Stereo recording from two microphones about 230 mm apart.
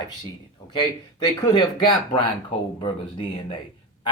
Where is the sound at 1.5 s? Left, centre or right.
Left.